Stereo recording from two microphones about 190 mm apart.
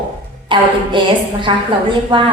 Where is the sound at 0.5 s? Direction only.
25° right (ahead or behind).